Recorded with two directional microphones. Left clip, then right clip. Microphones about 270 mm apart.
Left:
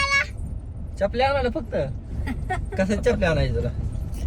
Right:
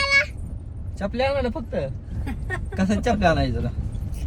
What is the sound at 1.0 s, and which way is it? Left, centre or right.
Speech, centre.